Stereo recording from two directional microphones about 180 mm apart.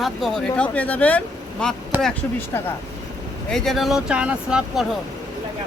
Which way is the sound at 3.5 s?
Centre (ahead or behind).